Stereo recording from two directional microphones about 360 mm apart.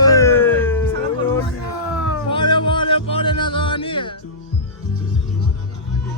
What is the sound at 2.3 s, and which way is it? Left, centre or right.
Music, centre.